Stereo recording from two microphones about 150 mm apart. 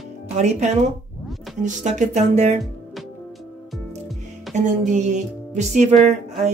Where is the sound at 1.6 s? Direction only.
55° right (ahead or behind).